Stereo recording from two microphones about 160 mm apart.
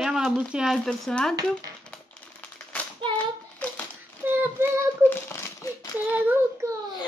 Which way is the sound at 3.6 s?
10° left (ahead or behind).